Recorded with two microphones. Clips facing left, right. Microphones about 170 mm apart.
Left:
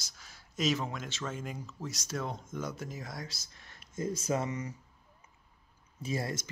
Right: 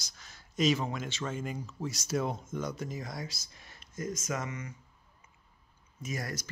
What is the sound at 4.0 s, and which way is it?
Speech, 30° left (ahead or behind).